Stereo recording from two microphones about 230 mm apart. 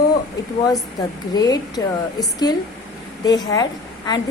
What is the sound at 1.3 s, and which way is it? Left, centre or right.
Speech, centre.